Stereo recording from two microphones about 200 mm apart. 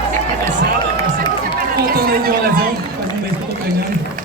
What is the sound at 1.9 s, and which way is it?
Chatter, 50° right (ahead or behind).